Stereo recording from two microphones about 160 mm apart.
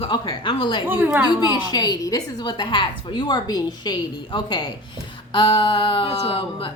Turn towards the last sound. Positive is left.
turn(degrees=35)  # may be behind; listen again after turning